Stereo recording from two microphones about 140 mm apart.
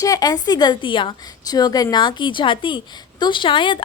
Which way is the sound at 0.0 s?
25° left (ahead or behind).